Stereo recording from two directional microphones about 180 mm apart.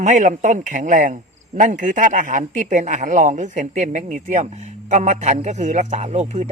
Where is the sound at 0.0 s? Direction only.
45° right (ahead or behind).